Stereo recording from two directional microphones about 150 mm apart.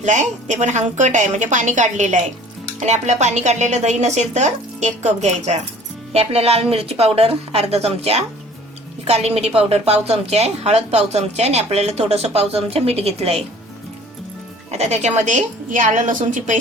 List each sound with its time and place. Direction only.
0.0 s a woman's voice: 55° right (ahead or behind)
14.7 s a woman's voice: 45° right (ahead or behind)